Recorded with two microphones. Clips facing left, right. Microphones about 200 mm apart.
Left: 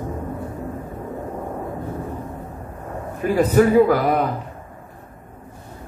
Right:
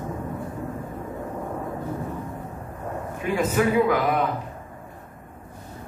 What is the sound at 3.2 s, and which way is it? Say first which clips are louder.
A woman's voice: left 7 dB; 40° left (ahead or behind).